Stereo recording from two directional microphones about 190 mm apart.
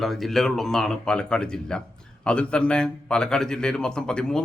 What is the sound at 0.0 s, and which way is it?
A man's voice, centre (ahead or behind).